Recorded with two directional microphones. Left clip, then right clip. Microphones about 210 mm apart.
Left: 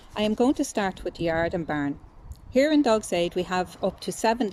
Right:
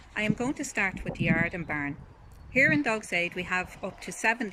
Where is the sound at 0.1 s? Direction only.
25° left (ahead or behind).